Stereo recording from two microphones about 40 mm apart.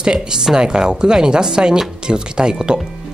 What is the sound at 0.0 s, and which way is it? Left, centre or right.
Speech, right.